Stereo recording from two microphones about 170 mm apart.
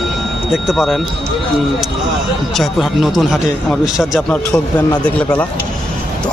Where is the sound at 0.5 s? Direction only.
Centre (ahead or behind).